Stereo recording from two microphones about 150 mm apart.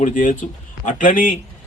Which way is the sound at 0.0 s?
60° left (ahead or behind).